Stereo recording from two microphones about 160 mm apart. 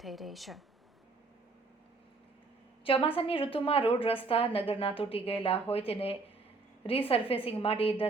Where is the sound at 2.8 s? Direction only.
35° left (ahead or behind).